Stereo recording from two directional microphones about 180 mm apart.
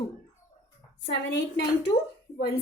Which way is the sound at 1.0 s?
70° left (ahead or behind).